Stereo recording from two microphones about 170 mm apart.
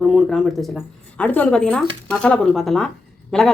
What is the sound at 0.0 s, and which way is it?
Speech, centre (ahead or behind).